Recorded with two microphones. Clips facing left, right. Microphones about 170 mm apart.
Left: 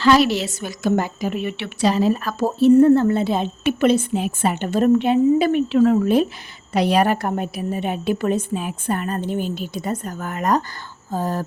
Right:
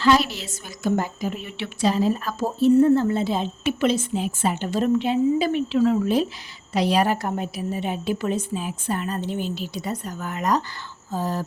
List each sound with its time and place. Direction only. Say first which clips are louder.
0.0 s a woman's voice: left 4 dB; 80° left; by 11.4 s 50° left (ahead or behind)